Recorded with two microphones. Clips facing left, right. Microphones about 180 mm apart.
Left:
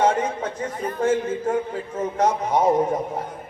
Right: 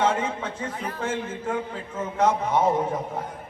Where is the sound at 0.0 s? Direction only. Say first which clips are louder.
Left 3 dB; 40° left (ahead or behind).